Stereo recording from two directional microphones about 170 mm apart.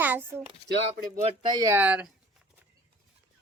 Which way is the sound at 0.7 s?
60° right (ahead or behind).